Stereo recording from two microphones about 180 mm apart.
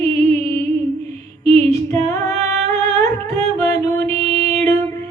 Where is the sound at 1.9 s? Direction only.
15° left (ahead or behind).